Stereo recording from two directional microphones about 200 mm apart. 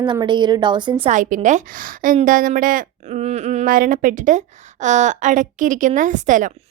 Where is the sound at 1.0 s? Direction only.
40° right (ahead or behind).